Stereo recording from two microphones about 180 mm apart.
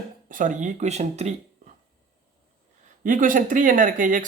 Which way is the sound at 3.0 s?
50° right (ahead or behind).